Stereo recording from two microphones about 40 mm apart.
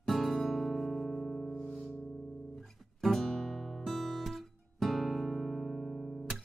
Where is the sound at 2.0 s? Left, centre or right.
Centre.